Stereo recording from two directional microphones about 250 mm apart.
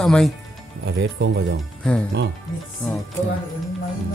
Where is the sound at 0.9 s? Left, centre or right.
Right.